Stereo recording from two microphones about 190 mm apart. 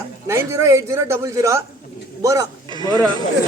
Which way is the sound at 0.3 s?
15° right (ahead or behind).